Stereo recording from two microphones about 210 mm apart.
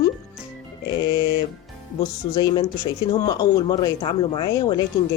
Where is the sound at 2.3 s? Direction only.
20° left (ahead or behind).